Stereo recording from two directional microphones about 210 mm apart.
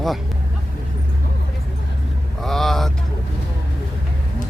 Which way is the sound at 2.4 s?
Centre (ahead or behind).